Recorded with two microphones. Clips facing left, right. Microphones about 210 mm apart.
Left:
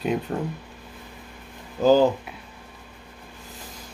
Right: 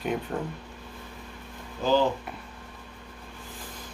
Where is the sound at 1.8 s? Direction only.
45° left (ahead or behind).